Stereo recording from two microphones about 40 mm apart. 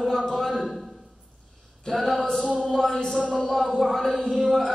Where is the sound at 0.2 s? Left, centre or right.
Centre.